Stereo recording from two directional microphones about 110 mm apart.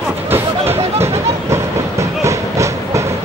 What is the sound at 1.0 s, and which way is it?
Train, 25° right (ahead or behind).